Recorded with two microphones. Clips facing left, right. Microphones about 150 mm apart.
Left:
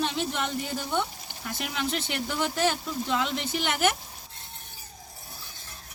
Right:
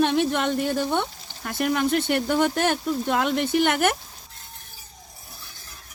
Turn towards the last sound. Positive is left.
turn(degrees=-55)  # may be behind; listen again after turning